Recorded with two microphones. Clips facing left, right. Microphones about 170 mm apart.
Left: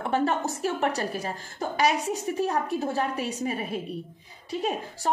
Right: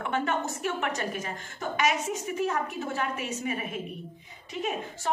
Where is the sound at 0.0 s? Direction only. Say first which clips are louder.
Left 4 dB; 35° left (ahead or behind).